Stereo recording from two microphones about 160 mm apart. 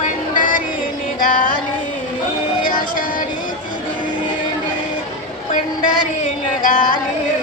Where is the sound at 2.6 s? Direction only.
60° left (ahead or behind).